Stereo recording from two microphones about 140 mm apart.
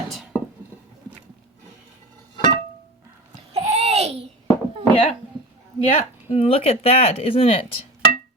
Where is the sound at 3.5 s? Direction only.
50° right (ahead or behind).